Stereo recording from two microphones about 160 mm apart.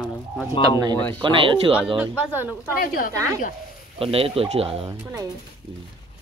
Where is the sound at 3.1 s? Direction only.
20° right (ahead or behind).